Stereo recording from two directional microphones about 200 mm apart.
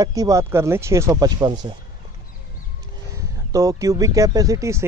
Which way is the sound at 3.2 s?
15° right (ahead or behind).